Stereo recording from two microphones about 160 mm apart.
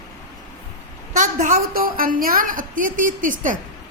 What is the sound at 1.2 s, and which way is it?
A woman's voice, 60° right (ahead or behind).